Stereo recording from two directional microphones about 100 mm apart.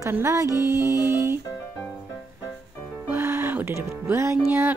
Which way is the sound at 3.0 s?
20° right (ahead or behind).